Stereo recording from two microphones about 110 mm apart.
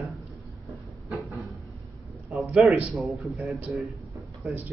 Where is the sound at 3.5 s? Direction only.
15° right (ahead or behind).